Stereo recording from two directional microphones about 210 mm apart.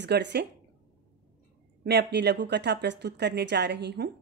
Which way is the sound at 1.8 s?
50° right (ahead or behind).